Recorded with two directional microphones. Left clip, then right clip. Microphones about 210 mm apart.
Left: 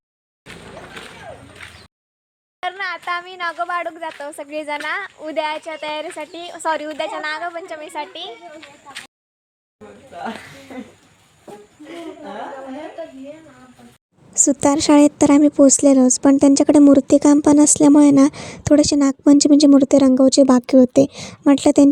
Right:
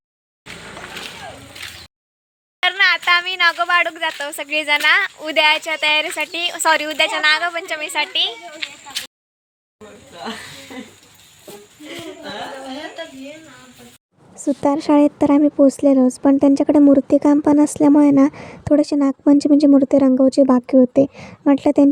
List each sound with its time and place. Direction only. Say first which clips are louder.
2.6 s speech: right 10 dB; 5° right (ahead or behind)
8.9 s a sound: right 8 dB; 5° right (ahead or behind)
14.3 s a woman's voice: left 2 dB; 30° left (ahead or behind)